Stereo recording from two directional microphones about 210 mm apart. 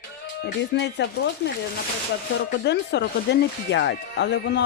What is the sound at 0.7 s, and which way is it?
Speech, 55° left (ahead or behind).